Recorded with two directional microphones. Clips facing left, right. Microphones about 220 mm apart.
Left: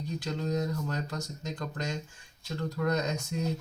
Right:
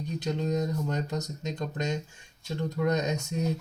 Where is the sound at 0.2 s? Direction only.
20° right (ahead or behind).